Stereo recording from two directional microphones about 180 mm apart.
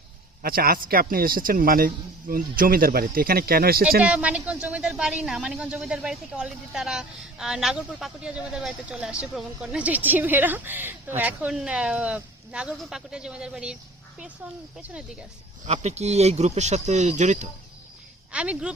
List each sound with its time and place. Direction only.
0.4 s a man's voice: 55° right (ahead or behind)
4.0 s a woman's voice: 5° right (ahead or behind)
14.8 s speech: 5° right (ahead or behind)
15.6 s speech: 40° right (ahead or behind)
18.3 s a woman's voice: 5° right (ahead or behind)